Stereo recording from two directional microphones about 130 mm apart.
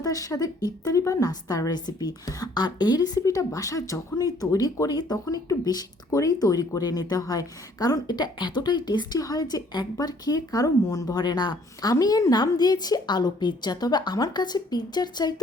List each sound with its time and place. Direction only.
0.0 s a woman's voice: 25° left (ahead or behind)